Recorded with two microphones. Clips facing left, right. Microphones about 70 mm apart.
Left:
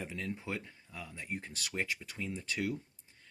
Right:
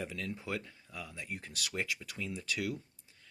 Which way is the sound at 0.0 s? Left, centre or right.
Left.